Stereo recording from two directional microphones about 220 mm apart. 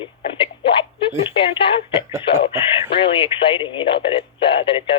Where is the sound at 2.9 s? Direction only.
25° left (ahead or behind).